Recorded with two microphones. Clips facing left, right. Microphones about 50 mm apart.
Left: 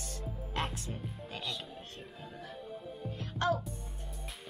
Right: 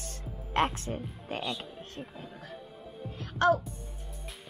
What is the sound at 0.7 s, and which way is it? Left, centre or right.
Speech, right.